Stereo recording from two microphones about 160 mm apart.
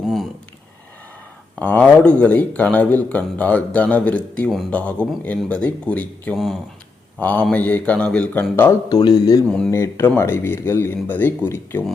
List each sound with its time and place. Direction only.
0.0 s a sound: centre (ahead or behind)
1.5 s speech: 10° left (ahead or behind)
6.3 s speech: centre (ahead or behind)
7.2 s speech: 10° left (ahead or behind)
8.9 s a man's voice: 25° left (ahead or behind)